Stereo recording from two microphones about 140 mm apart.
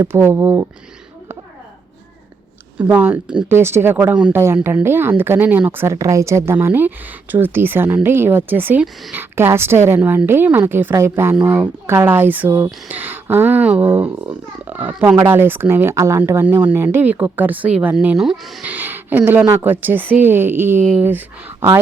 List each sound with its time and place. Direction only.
0.0 s speech: 15° right (ahead or behind)
2.7 s speech: 10° right (ahead or behind)